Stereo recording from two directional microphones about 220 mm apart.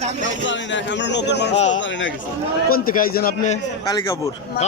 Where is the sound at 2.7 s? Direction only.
40° left (ahead or behind).